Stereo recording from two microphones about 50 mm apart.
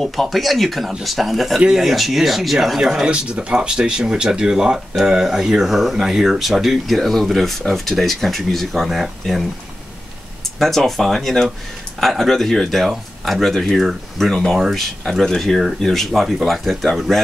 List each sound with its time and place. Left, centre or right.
0.0 s speech: centre
3.1 s speech: right; by 9.4 s centre
10.6 s speech: centre